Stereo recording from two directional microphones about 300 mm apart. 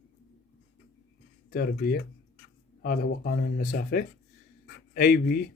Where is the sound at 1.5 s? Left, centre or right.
Left.